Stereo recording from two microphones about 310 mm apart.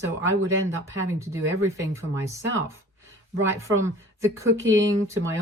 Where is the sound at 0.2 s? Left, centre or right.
Right.